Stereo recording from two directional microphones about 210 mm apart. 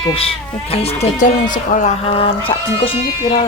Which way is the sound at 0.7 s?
30° left (ahead or behind).